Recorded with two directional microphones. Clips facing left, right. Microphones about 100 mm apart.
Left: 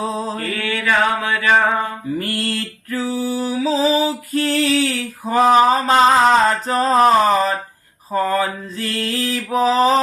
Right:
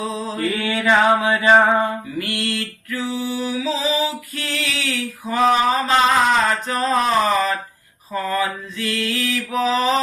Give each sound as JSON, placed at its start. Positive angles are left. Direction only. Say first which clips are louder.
{"t": 0.0, "sound": "mantra", "louder": "left 1 dB", "side_deg": 35}
{"t": 0.5, "sound": "mantra", "louder": "right 2 dB", "side_deg": -15}
{"t": 2.1, "sound": "a sound", "louder": "left 2 dB", "side_deg": 40}